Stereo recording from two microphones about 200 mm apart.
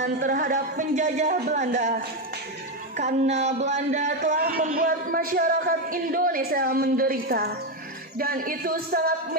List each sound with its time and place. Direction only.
0.0 s speech: 40° right (ahead or behind)